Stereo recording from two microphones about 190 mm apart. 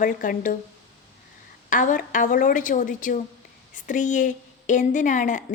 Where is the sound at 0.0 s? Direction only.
45° left (ahead or behind).